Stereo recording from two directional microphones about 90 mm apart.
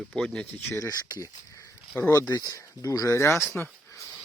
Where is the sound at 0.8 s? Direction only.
40° left (ahead or behind).